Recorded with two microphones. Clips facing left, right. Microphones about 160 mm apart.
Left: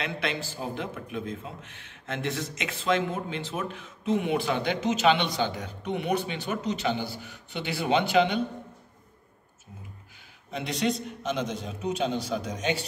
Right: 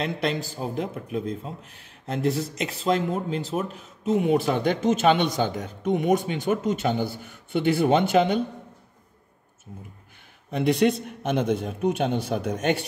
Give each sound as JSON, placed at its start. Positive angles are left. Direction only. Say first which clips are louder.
{"t": 0.0, "sound": "a man's voice", "louder": "right 5 dB", "side_deg": -40}
{"t": 10.5, "sound": "a man's voice", "louder": "right 7 dB", "side_deg": -55}